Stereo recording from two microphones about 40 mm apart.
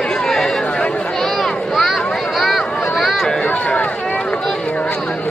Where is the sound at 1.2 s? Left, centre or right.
Centre.